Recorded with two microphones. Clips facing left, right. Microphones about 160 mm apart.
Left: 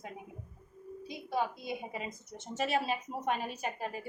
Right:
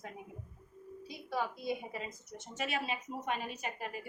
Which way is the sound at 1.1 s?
20° left (ahead or behind).